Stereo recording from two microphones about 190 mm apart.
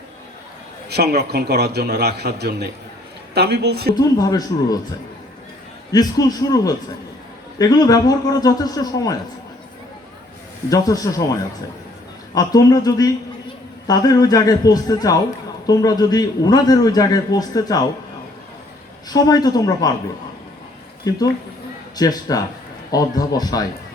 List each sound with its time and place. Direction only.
0.9 s a man's voice: 55° right (ahead or behind)
3.9 s a man's voice: 20° left (ahead or behind)
5.9 s a man's voice: 20° left (ahead or behind)
10.7 s a man's voice: 20° left (ahead or behind)
19.0 s a man's voice: 20° left (ahead or behind)
21.1 s a man's voice: 20° left (ahead or behind)